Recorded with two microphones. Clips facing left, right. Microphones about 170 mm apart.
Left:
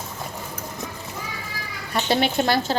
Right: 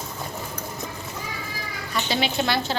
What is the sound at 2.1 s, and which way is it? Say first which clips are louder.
Speech: left 4 dB; 50° left (ahead or behind).